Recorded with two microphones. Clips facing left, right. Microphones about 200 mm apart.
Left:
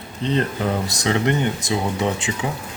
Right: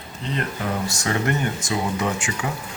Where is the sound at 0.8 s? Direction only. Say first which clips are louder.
Left 2 dB; 20° left (ahead or behind).